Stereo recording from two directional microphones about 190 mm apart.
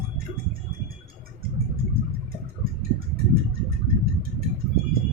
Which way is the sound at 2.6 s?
50° right (ahead or behind).